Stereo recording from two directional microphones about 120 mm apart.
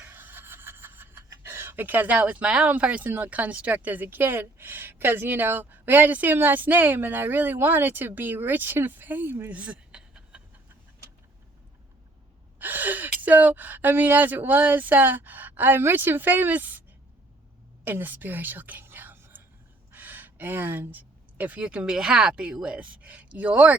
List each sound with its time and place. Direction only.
0.0 s speech: 15° right (ahead or behind)
12.5 s speech: 15° right (ahead or behind)
17.8 s a woman's voice: 15° right (ahead or behind)